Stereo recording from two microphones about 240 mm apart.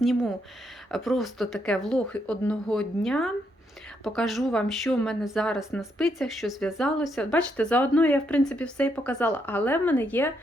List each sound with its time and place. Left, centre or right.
0.0 s speech: centre